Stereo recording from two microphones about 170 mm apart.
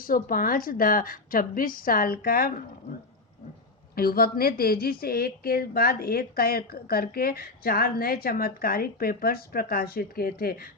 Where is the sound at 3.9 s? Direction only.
60° left (ahead or behind).